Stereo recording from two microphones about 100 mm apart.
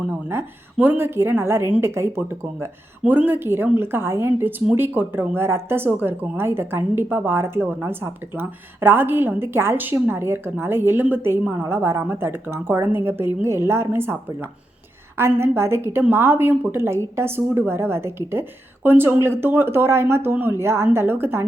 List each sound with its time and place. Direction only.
0.1 s a woman's voice: 20° right (ahead or behind)